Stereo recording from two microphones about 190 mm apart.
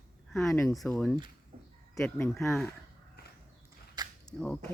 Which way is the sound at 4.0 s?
20° right (ahead or behind).